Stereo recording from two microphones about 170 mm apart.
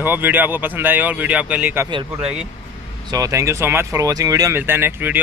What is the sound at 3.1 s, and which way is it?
Speech, 20° right (ahead or behind).